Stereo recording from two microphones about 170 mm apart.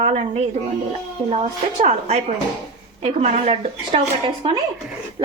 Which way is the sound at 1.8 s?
40° right (ahead or behind).